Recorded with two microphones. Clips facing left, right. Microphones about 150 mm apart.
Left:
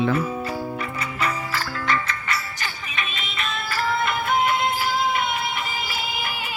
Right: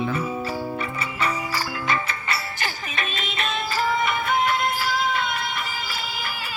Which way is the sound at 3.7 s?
10° right (ahead or behind).